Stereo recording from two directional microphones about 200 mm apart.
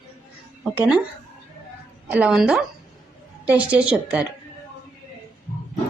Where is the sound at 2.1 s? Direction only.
5° right (ahead or behind).